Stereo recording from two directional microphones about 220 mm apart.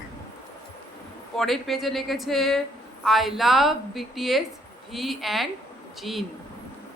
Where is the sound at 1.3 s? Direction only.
Centre (ahead or behind).